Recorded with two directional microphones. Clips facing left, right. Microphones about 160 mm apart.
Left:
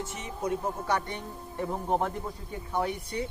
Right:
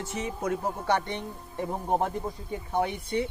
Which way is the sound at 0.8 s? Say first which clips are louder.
Right 4 dB; 25° right (ahead or behind).